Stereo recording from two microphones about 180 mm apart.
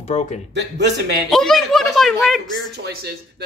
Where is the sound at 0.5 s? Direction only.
75° right (ahead or behind).